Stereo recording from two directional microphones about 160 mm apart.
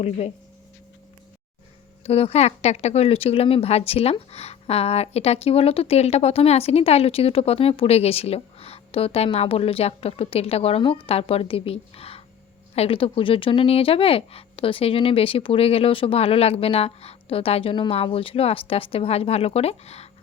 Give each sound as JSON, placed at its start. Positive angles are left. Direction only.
{"t": 2.0, "sound": "speech", "side_deg": 40}